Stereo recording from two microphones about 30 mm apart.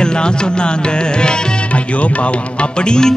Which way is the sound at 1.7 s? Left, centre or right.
Left.